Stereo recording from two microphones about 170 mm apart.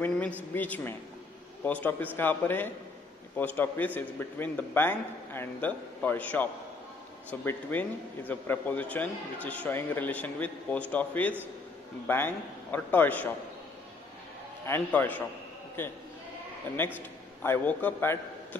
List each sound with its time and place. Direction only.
0.6 s a man's voice: 10° left (ahead or behind)
14.7 s a man's voice: 10° left (ahead or behind)
17.4 s a man's voice: 10° left (ahead or behind)